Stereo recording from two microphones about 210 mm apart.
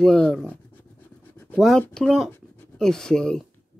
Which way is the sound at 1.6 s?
Centre (ahead or behind).